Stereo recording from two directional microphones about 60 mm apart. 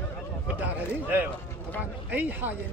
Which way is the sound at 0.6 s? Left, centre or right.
Right.